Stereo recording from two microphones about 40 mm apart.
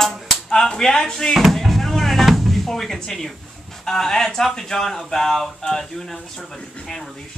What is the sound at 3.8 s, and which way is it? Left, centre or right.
Speech, centre.